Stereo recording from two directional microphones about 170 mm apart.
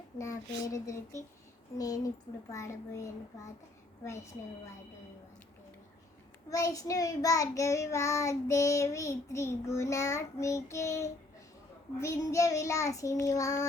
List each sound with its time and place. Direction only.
0.2 s child singing: 20° left (ahead or behind)
6.5 s child singing: 20° left (ahead or behind)